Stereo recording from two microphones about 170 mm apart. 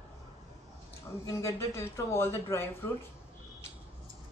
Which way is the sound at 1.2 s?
15° left (ahead or behind).